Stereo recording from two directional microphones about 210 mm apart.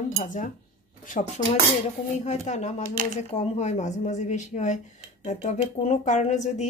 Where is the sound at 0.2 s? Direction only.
35° left (ahead or behind).